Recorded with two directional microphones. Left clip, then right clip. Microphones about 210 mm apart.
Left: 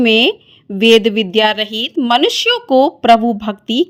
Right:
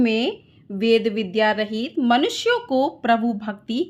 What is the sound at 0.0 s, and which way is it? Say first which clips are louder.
A woman's voice: left 10 dB; 35° left (ahead or behind).